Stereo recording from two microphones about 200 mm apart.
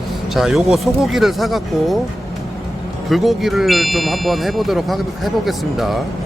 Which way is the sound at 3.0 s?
Centre (ahead or behind).